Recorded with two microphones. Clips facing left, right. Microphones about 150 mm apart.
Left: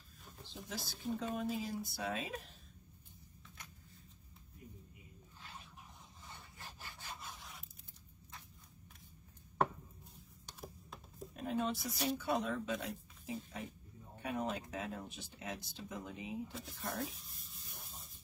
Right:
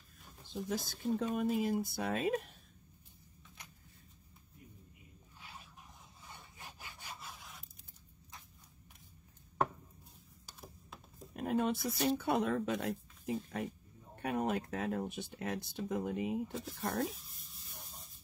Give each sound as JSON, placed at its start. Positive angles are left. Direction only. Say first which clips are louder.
{"t": 0.5, "sound": "speech", "louder": "right 9 dB", "side_deg": -50}
{"t": 5.4, "sound": "a sound", "louder": "even", "side_deg": -5}
{"t": 6.3, "sound": "zipper", "louder": "right 1 dB", "side_deg": -15}
{"t": 10.4, "sound": "a sound", "louder": "left 3 dB", "side_deg": 0}
{"t": 11.3, "sound": "speech", "louder": "right 4 dB", "side_deg": -55}
{"t": 16.5, "sound": "speech", "louder": "right 6 dB", "side_deg": -40}
{"t": 17.2, "sound": "sanding", "louder": "left 1 dB", "side_deg": 0}